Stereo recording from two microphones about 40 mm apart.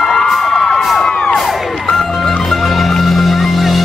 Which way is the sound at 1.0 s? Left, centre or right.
Centre.